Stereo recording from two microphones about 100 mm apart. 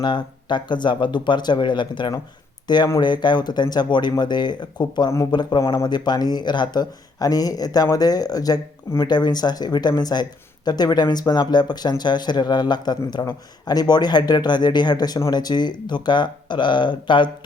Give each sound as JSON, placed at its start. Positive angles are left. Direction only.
{"t": 0.0, "sound": "speech", "side_deg": 50}